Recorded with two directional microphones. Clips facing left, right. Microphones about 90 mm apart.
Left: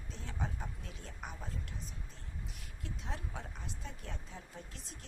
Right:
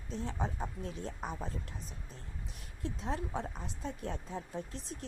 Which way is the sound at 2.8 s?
35° right (ahead or behind).